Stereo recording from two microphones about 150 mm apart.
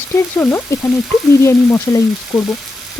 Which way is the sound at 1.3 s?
20° left (ahead or behind).